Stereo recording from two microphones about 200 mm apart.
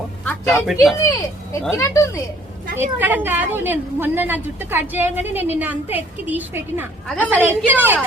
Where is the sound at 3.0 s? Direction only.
10° right (ahead or behind).